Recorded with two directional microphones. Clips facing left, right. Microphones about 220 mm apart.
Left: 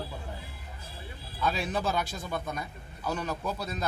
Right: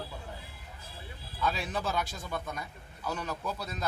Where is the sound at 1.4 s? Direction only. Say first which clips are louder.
Left 3 dB; 20° left (ahead or behind).